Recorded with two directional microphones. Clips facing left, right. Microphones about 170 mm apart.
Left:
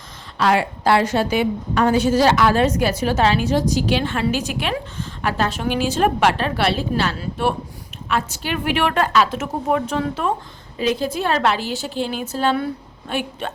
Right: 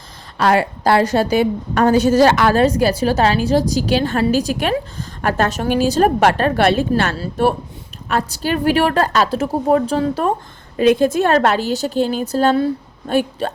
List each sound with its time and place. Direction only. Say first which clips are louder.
0.3 s a woman's voice: right 3 dB; 45° right (ahead or behind)
7.2 s a woman's voice: right 5 dB; 40° right (ahead or behind)
10.8 s a woman's voice: right 8 dB; 55° right (ahead or behind); by 13.5 s 40° right (ahead or behind)